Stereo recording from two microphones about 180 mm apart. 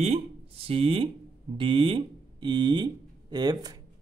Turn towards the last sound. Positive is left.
turn(degrees=-20)  # may be behind; listen again after turning